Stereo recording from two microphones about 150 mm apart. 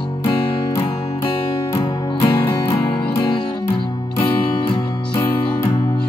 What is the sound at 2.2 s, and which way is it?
Music, 35° left (ahead or behind).